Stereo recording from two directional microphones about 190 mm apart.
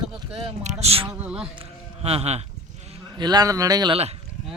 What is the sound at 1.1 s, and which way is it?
Speech, 5° right (ahead or behind).